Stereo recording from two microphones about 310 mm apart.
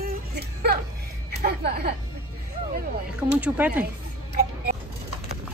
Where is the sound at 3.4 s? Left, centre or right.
Centre.